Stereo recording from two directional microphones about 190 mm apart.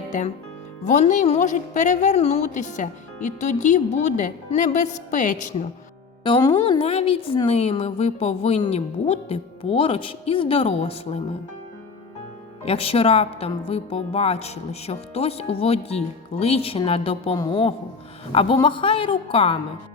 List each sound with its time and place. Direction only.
0.9 s a woman's voice: 40° left (ahead or behind)
6.2 s a woman's voice: 25° left (ahead or behind)
12.6 s a woman's voice: 30° left (ahead or behind)